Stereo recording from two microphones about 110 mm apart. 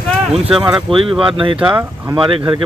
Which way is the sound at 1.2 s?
50° right (ahead or behind).